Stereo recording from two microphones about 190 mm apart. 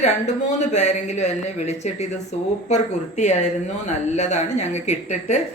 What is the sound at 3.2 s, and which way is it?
Speech, 35° left (ahead or behind).